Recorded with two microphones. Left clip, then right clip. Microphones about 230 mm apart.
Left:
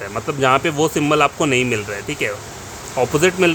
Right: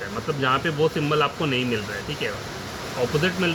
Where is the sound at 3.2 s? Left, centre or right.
Left.